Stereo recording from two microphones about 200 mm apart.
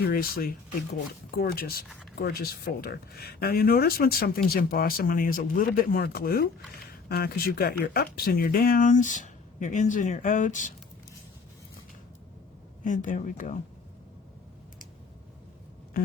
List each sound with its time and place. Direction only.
0.0 s speech: 50° left (ahead or behind)
12.8 s speech: 40° left (ahead or behind)
15.9 s a sound: 45° left (ahead or behind)